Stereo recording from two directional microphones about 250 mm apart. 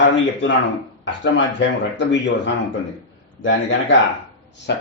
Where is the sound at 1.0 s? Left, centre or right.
Left.